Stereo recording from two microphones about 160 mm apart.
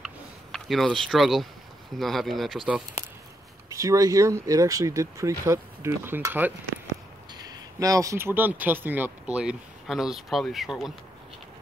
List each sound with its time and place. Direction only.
0.0 s a sound: centre (ahead or behind)
2.0 s speech: centre (ahead or behind)
3.6 s speech: 20° right (ahead or behind)
7.3 s speech: 25° right (ahead or behind); by 10.9 s centre (ahead or behind)